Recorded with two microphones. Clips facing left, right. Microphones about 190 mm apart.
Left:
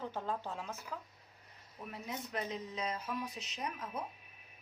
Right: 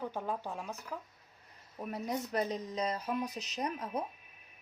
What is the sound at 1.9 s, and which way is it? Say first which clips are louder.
Speech: right 7 dB; 40° right (ahead or behind).